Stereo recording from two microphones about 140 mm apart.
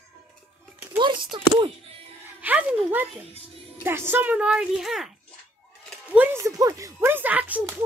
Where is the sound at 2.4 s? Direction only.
10° right (ahead or behind).